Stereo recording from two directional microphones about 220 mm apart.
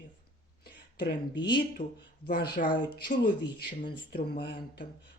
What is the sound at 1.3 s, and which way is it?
Speech, 20° left (ahead or behind).